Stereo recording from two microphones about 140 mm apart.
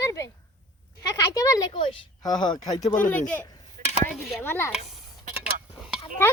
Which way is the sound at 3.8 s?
75° right (ahead or behind).